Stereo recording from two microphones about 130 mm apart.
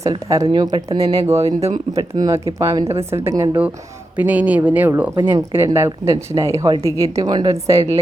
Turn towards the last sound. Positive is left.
turn(degrees=-25)  # may be behind; listen again after turning